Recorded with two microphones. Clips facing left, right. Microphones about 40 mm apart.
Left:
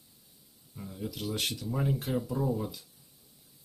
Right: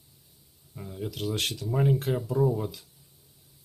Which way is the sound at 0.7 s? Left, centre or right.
Centre.